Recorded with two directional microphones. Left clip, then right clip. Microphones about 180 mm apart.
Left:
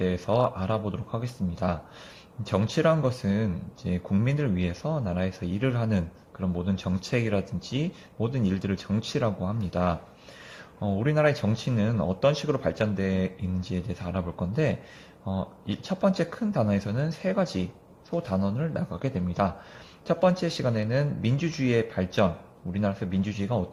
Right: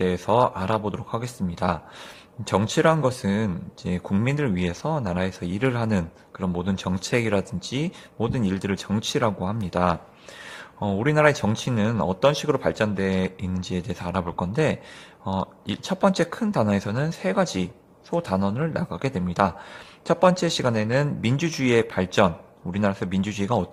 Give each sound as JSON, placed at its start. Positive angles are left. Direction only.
{"t": 0.0, "sound": "speech", "side_deg": -25}